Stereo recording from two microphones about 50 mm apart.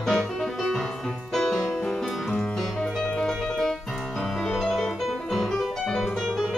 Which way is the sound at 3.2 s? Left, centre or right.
Centre.